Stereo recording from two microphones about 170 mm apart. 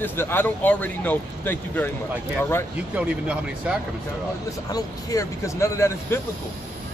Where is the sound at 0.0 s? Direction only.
15° left (ahead or behind).